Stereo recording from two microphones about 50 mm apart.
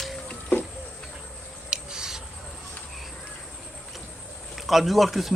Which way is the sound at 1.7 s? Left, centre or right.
Centre.